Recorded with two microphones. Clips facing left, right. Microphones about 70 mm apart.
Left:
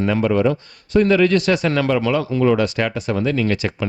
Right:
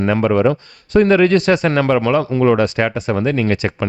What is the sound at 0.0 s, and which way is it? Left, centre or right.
Speech, right.